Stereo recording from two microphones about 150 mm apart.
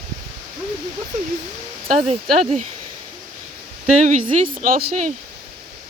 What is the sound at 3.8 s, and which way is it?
Speech, 55° right (ahead or behind).